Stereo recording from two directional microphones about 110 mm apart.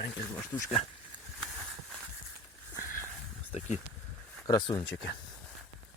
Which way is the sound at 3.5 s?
85° left.